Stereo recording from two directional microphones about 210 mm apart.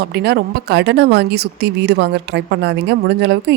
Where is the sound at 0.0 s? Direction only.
50° right (ahead or behind).